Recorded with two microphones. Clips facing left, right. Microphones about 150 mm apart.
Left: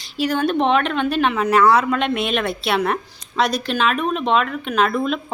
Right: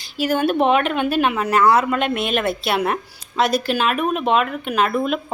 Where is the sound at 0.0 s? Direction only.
5° right (ahead or behind).